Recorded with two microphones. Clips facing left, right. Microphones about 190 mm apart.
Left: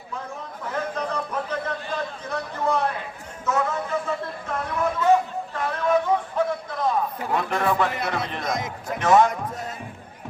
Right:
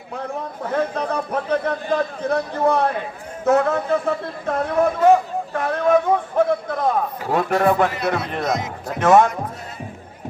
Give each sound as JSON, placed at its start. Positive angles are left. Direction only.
{"t": 0.7, "sound": "a man's voice", "side_deg": -60}
{"t": 5.5, "sound": "a sound", "side_deg": -55}
{"t": 7.3, "sound": "speech", "side_deg": -50}
{"t": 8.4, "sound": "speech", "side_deg": 50}
{"t": 9.0, "sound": "speech", "side_deg": -50}